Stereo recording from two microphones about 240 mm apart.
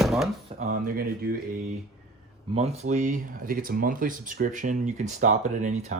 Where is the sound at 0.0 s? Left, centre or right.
Centre.